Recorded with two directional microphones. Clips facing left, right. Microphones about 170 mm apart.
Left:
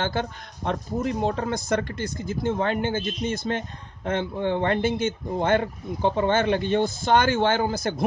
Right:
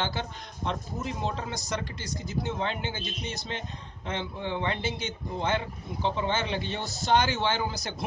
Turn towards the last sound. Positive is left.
turn(degrees=50)  # may be behind; listen again after turning